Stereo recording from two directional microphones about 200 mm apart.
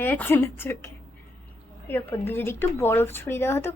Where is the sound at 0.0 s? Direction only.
10° left (ahead or behind).